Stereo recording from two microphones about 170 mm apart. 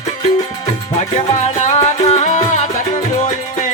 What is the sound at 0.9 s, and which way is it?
Music, 40° left (ahead or behind).